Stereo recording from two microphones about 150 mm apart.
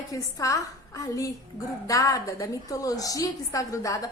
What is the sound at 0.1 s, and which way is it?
A woman's voice, 20° left (ahead or behind).